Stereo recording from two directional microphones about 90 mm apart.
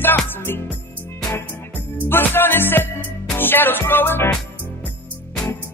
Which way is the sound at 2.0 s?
25° left (ahead or behind).